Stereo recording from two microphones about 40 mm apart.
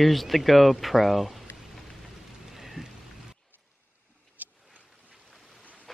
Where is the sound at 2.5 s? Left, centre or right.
Centre.